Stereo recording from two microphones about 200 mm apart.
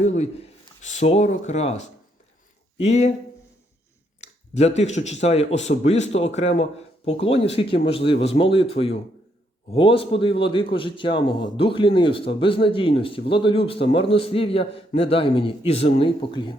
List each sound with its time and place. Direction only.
0.0 s a man's voice: 35° left (ahead or behind)
4.2 s a man's voice: 35° left (ahead or behind)